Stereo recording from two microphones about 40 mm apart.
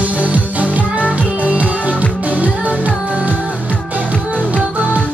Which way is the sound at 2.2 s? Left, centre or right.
Right.